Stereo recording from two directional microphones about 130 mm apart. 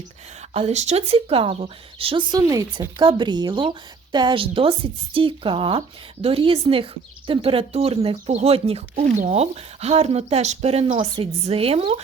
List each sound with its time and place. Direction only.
0.5 s speech: 50° right (ahead or behind)
2.4 s speech: 25° right (ahead or behind)
3.0 s speech: 35° right (ahead or behind)
9.1 s speech: 60° right (ahead or behind)
10.9 s speech: 40° right (ahead or behind)
11.4 s speech: 50° right (ahead or behind)